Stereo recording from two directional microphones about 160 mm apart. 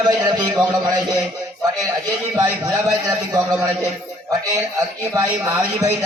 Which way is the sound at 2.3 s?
25° right (ahead or behind).